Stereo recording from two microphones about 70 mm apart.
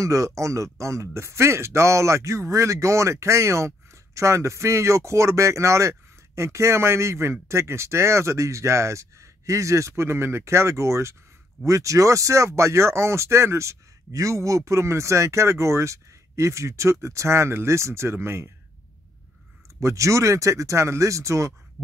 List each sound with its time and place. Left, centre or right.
0.0 s speech: right
19.8 s speech: right
21.8 s a sound: right